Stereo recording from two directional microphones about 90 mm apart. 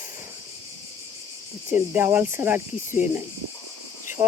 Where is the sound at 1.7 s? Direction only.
25° right (ahead or behind).